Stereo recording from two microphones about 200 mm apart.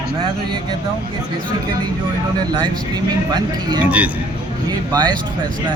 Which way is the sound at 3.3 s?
20° right (ahead or behind).